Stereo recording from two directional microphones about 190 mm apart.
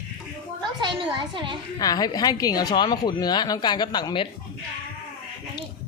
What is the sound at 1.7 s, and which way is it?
A woman's voice, 20° left (ahead or behind).